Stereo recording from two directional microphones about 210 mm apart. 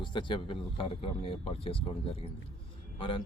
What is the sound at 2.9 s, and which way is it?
Speech, 25° left (ahead or behind).